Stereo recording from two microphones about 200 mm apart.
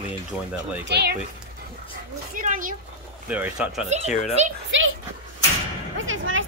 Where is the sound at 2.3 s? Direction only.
40° right (ahead or behind).